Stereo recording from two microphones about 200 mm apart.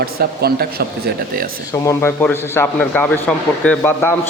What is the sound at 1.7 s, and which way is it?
A man's voice, 15° left (ahead or behind).